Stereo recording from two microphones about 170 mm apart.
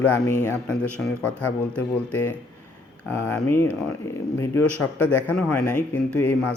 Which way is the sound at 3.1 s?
15° left (ahead or behind).